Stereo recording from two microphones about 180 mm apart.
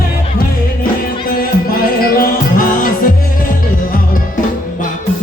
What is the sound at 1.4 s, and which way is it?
Music, 55° left (ahead or behind).